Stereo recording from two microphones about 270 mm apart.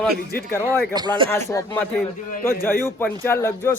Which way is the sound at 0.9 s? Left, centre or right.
Centre.